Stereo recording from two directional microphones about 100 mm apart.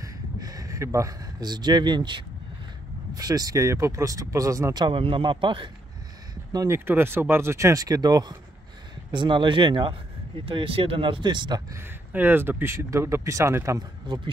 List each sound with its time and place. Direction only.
0.0 s a sound: 35° right (ahead or behind)
3.2 s speech: 40° right (ahead or behind)
4.8 s speech: 65° right (ahead or behind)
6.7 s speech: 25° right (ahead or behind); by 11.6 s 50° right (ahead or behind)
12.1 s speech: 20° right (ahead or behind)
13.7 s speech: 50° right (ahead or behind)